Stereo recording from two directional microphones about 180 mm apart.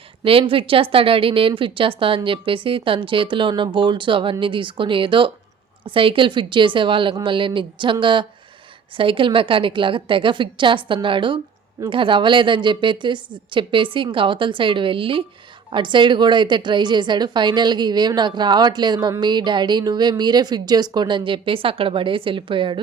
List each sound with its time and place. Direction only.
0.3 s a woman's voice: 30° right (ahead or behind)